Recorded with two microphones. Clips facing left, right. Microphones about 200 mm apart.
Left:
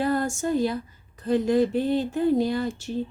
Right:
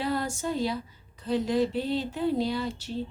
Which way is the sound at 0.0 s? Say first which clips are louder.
Left 5 dB; 50° left (ahead or behind).